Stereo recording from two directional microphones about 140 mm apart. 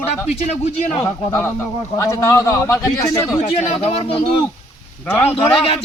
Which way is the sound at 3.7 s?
45° left (ahead or behind).